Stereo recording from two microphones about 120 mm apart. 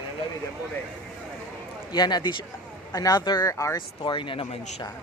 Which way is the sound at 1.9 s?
35° left (ahead or behind).